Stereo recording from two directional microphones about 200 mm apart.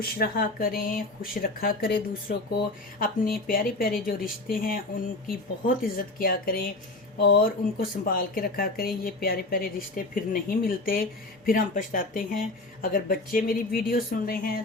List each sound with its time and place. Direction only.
0.0 s speech: 50° left (ahead or behind)
3.4 s speech: 45° left (ahead or behind)